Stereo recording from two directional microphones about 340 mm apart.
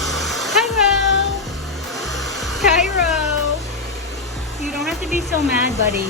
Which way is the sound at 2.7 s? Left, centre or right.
Left.